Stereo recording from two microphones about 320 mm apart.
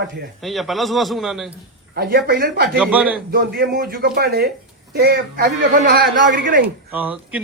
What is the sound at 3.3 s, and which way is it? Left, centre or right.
A man's voice, right.